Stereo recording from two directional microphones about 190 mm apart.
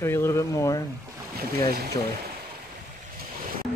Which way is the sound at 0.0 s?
15° left (ahead or behind).